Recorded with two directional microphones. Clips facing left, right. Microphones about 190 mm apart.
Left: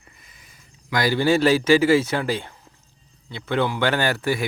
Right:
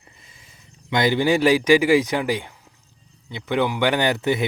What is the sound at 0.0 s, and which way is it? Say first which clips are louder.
Speech: right 1 dB; 25° right (ahead or behind).